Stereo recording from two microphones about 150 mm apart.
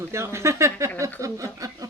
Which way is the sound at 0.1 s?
20° right (ahead or behind).